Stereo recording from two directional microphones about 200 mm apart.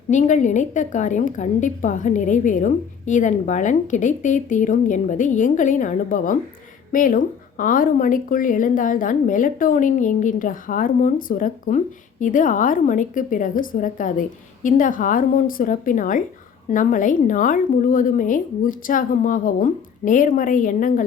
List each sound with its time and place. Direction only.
0.1 s a woman's voice: 40° left (ahead or behind)